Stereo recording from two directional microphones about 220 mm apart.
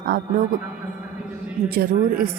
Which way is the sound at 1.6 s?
45° right (ahead or behind).